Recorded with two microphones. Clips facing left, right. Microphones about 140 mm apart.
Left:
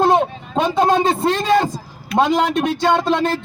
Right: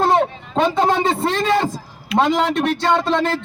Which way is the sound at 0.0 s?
15° left (ahead or behind).